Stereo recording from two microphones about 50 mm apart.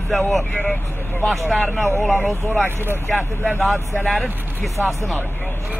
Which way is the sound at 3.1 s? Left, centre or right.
Centre.